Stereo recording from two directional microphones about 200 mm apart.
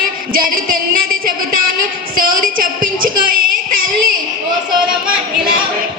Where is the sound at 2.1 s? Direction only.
45° right (ahead or behind).